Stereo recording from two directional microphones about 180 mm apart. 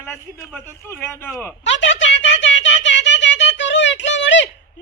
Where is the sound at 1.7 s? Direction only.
90° left.